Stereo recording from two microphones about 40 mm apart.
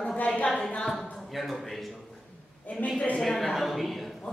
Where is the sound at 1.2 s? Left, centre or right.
Centre.